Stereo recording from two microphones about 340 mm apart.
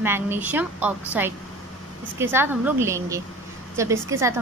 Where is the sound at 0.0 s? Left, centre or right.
Centre.